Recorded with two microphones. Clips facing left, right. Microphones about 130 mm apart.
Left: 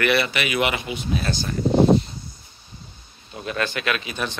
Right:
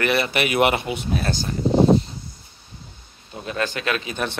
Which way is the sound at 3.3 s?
30° right (ahead or behind).